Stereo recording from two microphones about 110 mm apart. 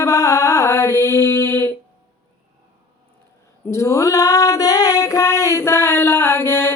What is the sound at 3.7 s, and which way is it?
Female singing, 25° left (ahead or behind).